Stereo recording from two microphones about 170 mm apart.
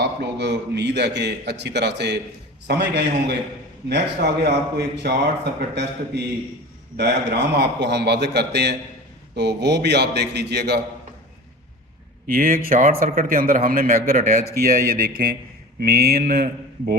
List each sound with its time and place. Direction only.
0.0 s a man's voice: 85° right
5.7 s a man's voice: 90° right
12.3 s mantra: 55° right (ahead or behind)